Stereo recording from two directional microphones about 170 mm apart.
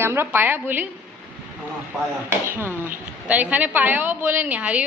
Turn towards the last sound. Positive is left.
turn(degrees=-10)  # may be behind; listen again after turning